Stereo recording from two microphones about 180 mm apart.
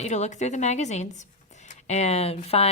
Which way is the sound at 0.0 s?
40° left (ahead or behind).